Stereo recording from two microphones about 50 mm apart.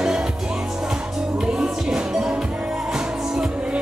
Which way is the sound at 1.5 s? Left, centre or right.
Centre.